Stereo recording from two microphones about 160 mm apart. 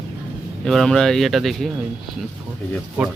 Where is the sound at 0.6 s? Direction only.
Centre (ahead or behind).